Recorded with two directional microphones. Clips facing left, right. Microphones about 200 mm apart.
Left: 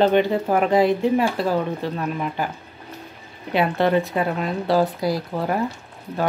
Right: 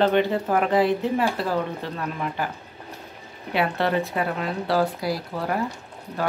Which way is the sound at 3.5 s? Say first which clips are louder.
Left 4 dB; 20° left (ahead or behind).